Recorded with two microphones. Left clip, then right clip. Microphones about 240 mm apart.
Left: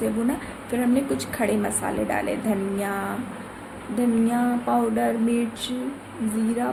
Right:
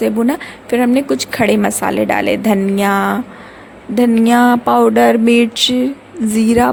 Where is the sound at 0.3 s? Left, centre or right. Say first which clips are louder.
Right 11 dB; right.